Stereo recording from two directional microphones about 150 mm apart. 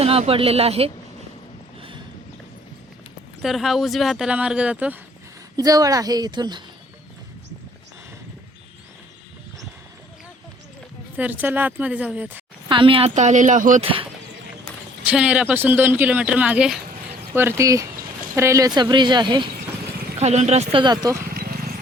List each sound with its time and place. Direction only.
0.0 s speech: 40° right (ahead or behind)
3.4 s speech: centre (ahead or behind)
5.5 s speech: 25° right (ahead or behind)
11.2 s speech: 10° right (ahead or behind)
12.6 s a woman's voice: 35° right (ahead or behind)
13.1 s speech: 50° right (ahead or behind)
13.8 s speech: 35° right (ahead or behind)
15.0 s speech: 5° right (ahead or behind)
17.3 s speech: 15° right (ahead or behind); by 19.5 s 30° right (ahead or behind)
20.1 s speech: 45° right (ahead or behind)
20.8 s speech: 25° right (ahead or behind)
21.3 s a sound: 90° right